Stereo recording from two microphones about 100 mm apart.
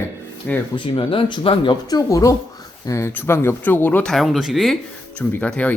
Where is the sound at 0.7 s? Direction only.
60° left (ahead or behind).